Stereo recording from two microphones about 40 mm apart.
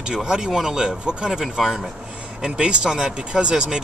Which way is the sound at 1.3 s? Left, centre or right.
Centre.